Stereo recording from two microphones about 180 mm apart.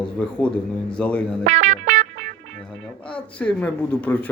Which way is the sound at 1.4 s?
40° right (ahead or behind).